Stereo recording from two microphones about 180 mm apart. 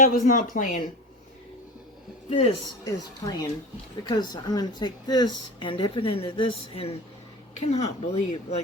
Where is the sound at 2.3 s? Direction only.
35° left (ahead or behind).